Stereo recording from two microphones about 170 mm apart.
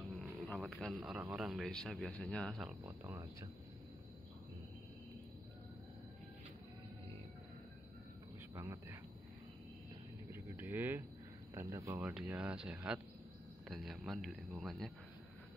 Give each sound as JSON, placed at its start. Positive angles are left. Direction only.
{"t": 0.2, "sound": "speech", "side_deg": 5}
{"t": 2.8, "sound": "speech", "side_deg": -20}
{"t": 8.5, "sound": "speech", "side_deg": -15}
{"t": 10.3, "sound": "vehicle", "side_deg": -10}
{"t": 11.5, "sound": "speech", "side_deg": -15}